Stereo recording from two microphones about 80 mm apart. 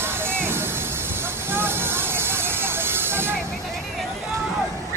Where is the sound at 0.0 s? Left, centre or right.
Right.